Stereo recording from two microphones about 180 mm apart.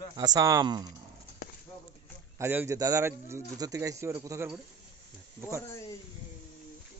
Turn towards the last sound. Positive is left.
turn(degrees=15)  # may be behind; listen again after turning